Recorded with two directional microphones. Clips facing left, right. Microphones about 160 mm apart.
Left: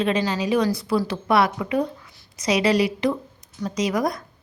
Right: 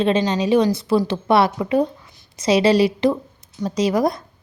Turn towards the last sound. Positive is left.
turn(degrees=-30)  # may be behind; listen again after turning